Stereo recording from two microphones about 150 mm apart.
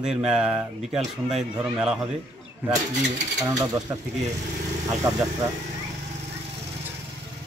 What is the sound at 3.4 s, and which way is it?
Speech, 25° right (ahead or behind).